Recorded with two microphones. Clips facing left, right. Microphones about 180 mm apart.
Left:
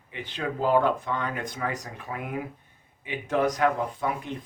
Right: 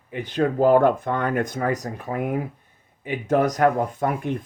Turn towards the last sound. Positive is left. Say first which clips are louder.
# right 6 dB
turn(degrees=-50)  # may be behind; listen again after turning